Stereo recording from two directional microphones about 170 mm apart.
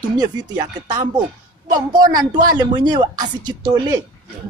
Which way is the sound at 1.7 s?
25° right (ahead or behind).